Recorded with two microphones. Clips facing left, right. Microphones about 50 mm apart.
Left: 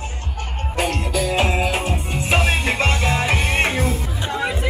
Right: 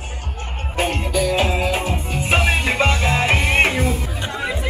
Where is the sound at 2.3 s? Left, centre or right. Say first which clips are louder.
Right 1 dB; centre.